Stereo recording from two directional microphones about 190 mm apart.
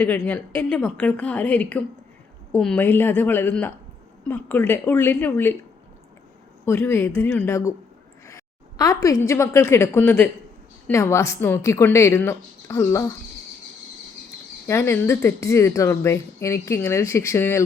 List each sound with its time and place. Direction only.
0.0 s speech: 10° left (ahead or behind)
6.7 s speech: 10° left (ahead or behind)
8.8 s speech: 20° left (ahead or behind)
14.7 s speech: 15° left (ahead or behind)